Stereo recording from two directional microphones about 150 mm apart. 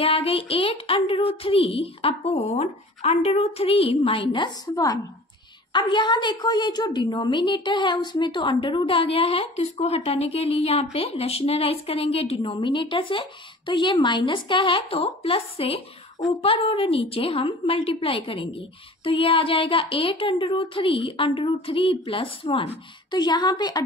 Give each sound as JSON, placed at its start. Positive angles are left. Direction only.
{"t": 0.0, "sound": "a woman's voice", "side_deg": 40}